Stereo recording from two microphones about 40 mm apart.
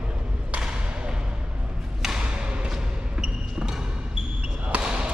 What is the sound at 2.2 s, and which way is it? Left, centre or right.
Thump, right.